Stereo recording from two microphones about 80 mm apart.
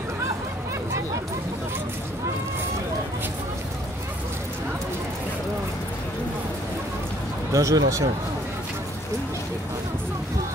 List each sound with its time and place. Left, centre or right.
7.5 s speech: right